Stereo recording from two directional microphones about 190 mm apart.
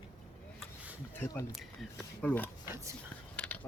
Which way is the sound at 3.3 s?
10° left (ahead or behind).